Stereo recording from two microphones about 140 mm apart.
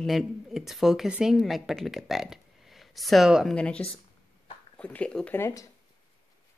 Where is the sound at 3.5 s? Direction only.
10° left (ahead or behind).